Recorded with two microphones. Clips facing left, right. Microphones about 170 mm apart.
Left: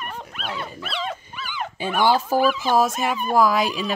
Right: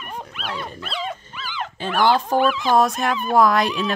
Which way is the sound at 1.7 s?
10° left (ahead or behind).